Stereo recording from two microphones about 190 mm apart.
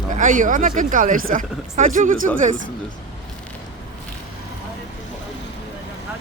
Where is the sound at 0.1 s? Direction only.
45° right (ahead or behind).